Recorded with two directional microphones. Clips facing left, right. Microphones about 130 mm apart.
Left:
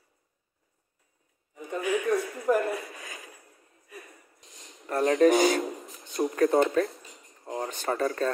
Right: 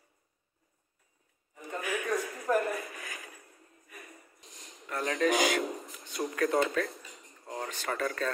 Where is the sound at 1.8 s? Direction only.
20° left (ahead or behind).